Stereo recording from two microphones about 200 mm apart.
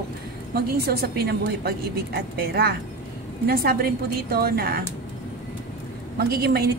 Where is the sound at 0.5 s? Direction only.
50° right (ahead or behind).